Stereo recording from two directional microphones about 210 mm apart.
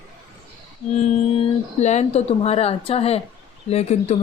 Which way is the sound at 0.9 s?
30° left (ahead or behind).